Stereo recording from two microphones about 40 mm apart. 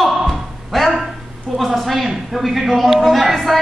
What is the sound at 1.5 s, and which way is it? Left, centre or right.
Speech, centre.